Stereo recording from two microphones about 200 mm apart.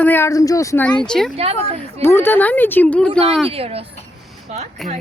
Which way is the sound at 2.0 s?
10° left (ahead or behind).